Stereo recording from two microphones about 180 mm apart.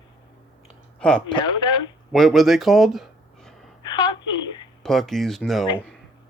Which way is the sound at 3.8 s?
25° left (ahead or behind).